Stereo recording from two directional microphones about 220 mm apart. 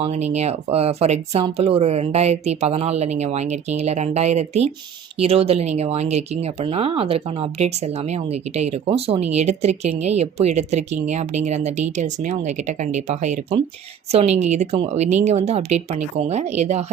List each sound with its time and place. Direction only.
0.0 s speech: 30° right (ahead or behind)